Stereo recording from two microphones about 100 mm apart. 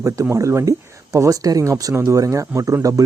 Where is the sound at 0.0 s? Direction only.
30° right (ahead or behind).